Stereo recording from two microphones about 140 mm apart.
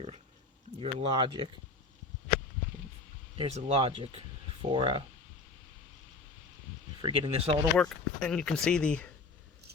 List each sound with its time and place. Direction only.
0.8 s speech: 45° right (ahead or behind)
1.1 s speech: 30° right (ahead or behind)
3.3 s speech: 45° right (ahead or behind)
7.0 s speech: 45° right (ahead or behind)
7.8 s speech: 5° left (ahead or behind)